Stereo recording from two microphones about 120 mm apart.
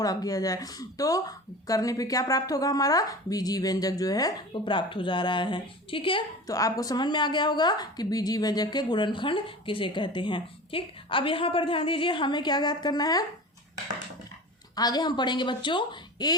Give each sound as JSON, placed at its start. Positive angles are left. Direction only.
{"t": 0.0, "sound": "a woman's voice", "side_deg": 30}
{"t": 6.5, "sound": "a woman's voice", "side_deg": 30}
{"t": 14.8, "sound": "a woman's voice", "side_deg": 35}